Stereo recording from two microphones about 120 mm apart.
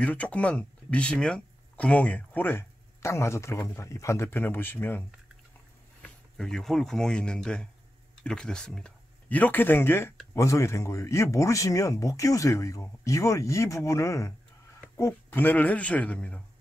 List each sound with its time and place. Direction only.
0.0 s speech: 10° left (ahead or behind)
6.0 s speech: 5° left (ahead or behind)